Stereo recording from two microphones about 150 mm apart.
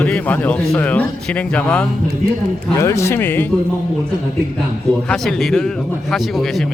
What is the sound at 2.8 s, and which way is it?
Speech, 20° left (ahead or behind).